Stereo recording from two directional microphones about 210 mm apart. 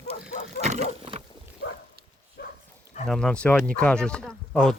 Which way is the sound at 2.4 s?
50° left (ahead or behind).